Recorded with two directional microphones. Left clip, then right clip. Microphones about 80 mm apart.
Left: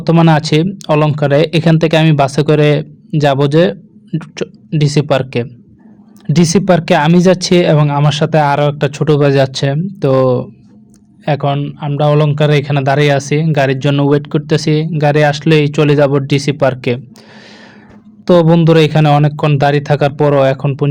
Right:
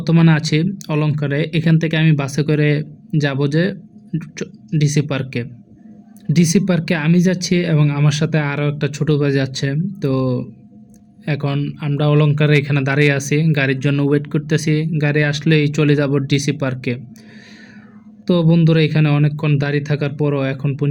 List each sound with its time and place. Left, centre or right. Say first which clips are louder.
0.0 s speech: left 7 dB; left
1.1 s speech: left 10 dB; left
7.8 s speech: left 7 dB; left
11.5 s speech: left 4 dB; centre
11.8 s speech: left 5 dB; centre; by 13.7 s left
13.7 s speech: left 5 dB; left
18.3 s speech: left 8 dB; left